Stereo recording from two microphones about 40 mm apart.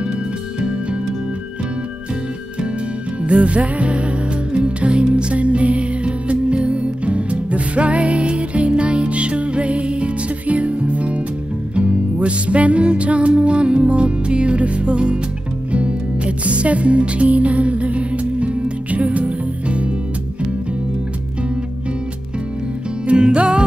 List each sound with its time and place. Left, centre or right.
3.3 s music: right
23.0 s music: right